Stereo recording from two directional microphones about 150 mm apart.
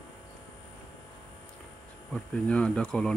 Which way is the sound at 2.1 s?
5° left (ahead or behind).